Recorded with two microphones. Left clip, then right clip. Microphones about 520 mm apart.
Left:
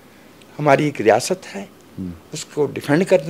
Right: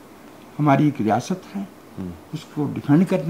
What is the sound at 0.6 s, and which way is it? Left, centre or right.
A man's voice, left.